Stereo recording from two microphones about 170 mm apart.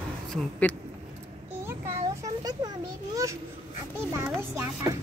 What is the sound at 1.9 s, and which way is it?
Speech, 20° right (ahead or behind).